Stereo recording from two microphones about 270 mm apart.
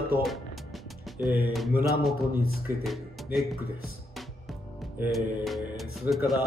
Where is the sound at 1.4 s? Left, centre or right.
Centre.